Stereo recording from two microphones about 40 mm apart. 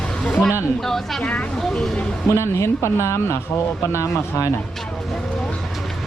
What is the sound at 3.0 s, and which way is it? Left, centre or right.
Speech, left.